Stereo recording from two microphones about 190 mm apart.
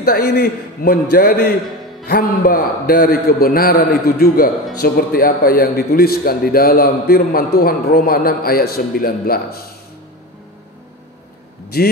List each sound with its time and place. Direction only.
0.0 s a man's voice: 55° left (ahead or behind)
11.7 s a man's voice: 55° left (ahead or behind)